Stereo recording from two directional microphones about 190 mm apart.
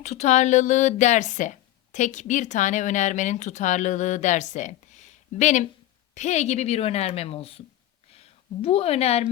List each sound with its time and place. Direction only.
0.0 s speech: 35° left (ahead or behind)
8.6 s speech: 30° left (ahead or behind)